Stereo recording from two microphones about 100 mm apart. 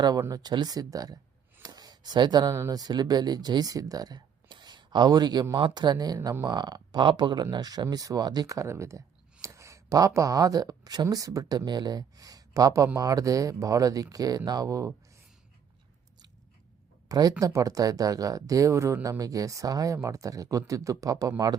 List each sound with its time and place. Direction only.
0.2 s speech: 40° right (ahead or behind)
1.6 s a sound: 40° right (ahead or behind)
2.5 s speech: 35° right (ahead or behind)
17.1 s speech: 40° right (ahead or behind)